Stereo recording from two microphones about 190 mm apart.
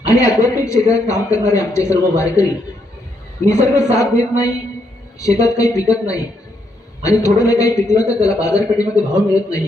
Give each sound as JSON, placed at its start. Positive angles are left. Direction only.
{"t": 0.1, "sound": "a man's voice", "side_deg": 15}
{"t": 5.5, "sound": "a man's voice", "side_deg": 15}